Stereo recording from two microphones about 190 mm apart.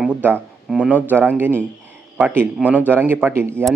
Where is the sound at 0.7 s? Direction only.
5° right (ahead or behind).